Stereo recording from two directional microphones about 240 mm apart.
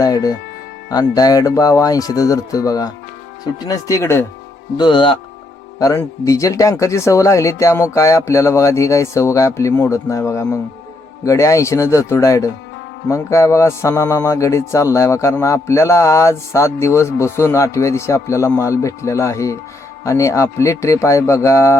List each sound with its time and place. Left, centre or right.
0.0 s speech: centre